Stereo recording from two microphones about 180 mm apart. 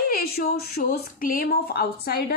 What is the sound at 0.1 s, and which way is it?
A woman's voice, 55° left (ahead or behind).